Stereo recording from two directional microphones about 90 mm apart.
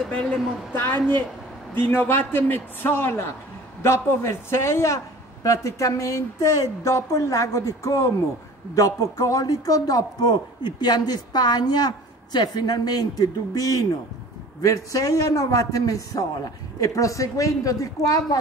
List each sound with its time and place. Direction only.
0.0 s a woman's voice: 15° left (ahead or behind)
0.7 s a man's voice: 25° left (ahead or behind); by 18.4 s 40° left (ahead or behind)